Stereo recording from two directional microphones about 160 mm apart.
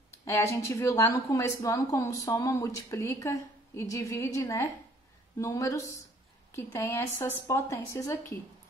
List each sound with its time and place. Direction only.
0.2 s a woman's voice: 15° left (ahead or behind)